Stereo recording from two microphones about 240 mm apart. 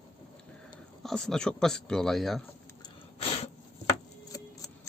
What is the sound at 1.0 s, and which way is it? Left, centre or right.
Speech, centre.